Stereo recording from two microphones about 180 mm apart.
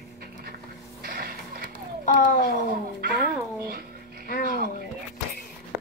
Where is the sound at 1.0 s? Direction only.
55° right (ahead or behind).